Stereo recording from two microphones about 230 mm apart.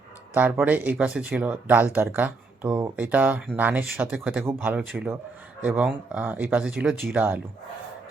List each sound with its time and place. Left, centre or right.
0.3 s speech: centre